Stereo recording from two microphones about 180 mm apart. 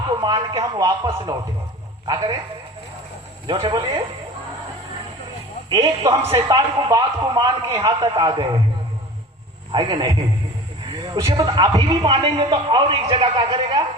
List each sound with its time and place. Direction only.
0.2 s a man's voice: 25° right (ahead or behind)
3.4 s a man's voice: 25° right (ahead or behind)
5.6 s a man's voice: 25° right (ahead or behind)
9.7 s a man's voice: 25° right (ahead or behind)